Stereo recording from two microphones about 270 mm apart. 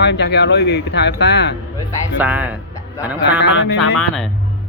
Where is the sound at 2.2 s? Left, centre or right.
Centre.